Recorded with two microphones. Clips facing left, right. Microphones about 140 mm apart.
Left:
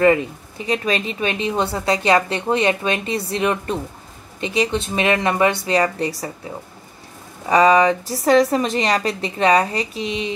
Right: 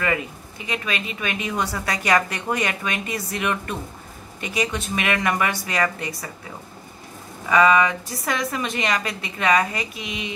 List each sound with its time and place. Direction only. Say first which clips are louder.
0.0 s a woman's voice: left 9 dB; 30° left (ahead or behind)
7.4 s a woman's voice: left 4 dB; 35° left (ahead or behind)